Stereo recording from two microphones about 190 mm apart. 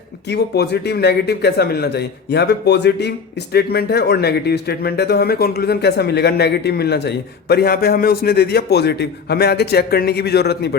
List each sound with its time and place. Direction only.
0.3 s speech: 60° left (ahead or behind)